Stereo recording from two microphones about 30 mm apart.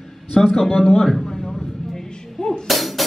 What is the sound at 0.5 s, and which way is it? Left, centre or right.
Speech, centre.